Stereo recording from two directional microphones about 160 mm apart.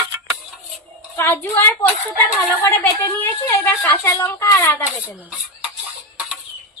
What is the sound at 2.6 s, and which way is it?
A woman's voice, 15° left (ahead or behind).